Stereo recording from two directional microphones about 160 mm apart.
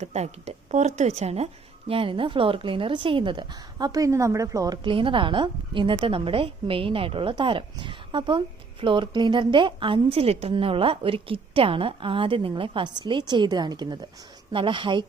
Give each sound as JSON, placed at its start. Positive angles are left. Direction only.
{"t": 0.0, "sound": "a woman's voice", "side_deg": -45}